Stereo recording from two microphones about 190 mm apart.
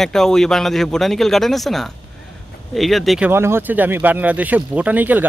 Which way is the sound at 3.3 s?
10° right (ahead or behind).